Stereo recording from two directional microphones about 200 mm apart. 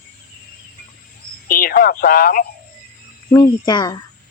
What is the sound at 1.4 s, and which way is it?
Speech, 45° left (ahead or behind).